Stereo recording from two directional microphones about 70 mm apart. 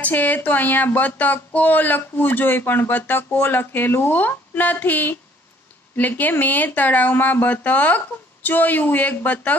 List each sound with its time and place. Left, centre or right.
0.0 s speech: left